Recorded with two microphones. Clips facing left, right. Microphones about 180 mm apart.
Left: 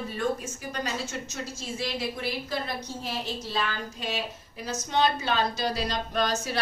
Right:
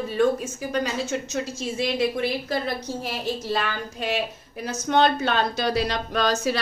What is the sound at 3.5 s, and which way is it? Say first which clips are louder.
A woman's voice: right 4 dB; 65° right (ahead or behind).